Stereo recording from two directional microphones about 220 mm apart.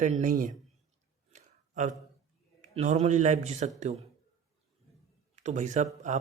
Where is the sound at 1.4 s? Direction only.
35° right (ahead or behind).